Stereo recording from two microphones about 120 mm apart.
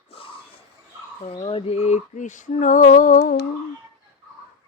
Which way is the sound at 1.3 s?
55° left (ahead or behind).